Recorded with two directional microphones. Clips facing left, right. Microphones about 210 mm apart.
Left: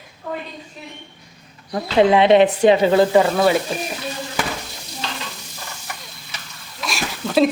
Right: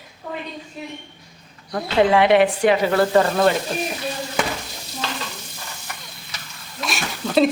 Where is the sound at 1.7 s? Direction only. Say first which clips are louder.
Left 2 dB; 20° left (ahead or behind).